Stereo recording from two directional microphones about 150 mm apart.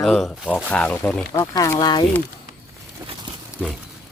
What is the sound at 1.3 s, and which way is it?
Speech, 25° left (ahead or behind).